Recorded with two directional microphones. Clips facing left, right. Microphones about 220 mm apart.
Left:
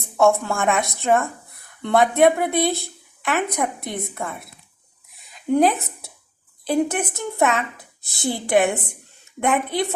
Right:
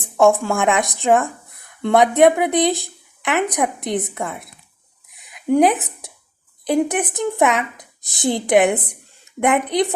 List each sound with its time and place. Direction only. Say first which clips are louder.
0.0 s speech: right 3 dB; 15° right (ahead or behind)
5.5 s speech: right 2 dB; 15° right (ahead or behind)